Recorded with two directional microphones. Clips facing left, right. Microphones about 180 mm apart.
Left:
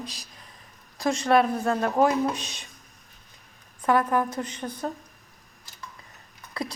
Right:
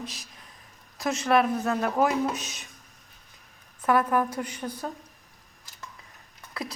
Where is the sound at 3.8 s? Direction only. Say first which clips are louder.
Left 1 dB; 5° right (ahead or behind).